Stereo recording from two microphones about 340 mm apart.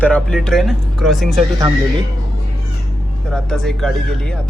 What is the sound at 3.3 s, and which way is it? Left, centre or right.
Speech, centre.